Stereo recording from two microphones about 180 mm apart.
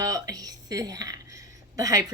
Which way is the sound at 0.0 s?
20° right (ahead or behind).